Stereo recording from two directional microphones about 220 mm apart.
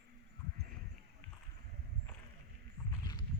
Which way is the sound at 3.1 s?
20° left (ahead or behind).